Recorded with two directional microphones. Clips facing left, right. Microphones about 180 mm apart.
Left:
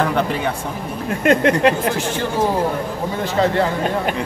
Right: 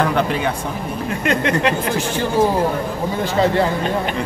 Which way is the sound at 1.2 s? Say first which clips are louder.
Left 4 dB; 45° left (ahead or behind).